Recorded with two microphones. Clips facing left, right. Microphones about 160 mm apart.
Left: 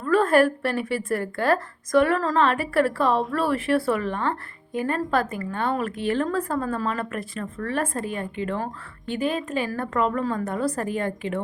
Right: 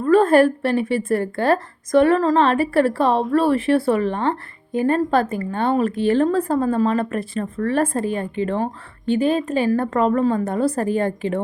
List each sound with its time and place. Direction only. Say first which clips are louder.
0.0 s speech: right 5 dB; 25° right (ahead or behind)